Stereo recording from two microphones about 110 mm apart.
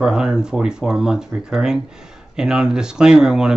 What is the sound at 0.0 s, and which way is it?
Speech, 5° right (ahead or behind).